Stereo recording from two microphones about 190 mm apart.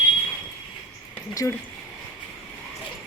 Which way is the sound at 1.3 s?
15° left (ahead or behind).